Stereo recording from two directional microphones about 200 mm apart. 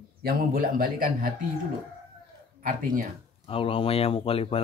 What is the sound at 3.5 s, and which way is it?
Speech, 25° left (ahead or behind).